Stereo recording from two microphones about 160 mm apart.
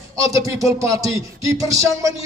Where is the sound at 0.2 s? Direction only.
20° right (ahead or behind).